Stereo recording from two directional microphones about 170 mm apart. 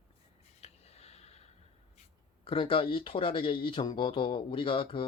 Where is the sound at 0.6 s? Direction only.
40° left (ahead or behind).